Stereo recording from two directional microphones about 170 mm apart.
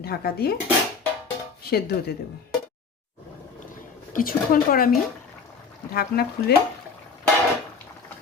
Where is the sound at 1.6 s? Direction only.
65° left (ahead or behind).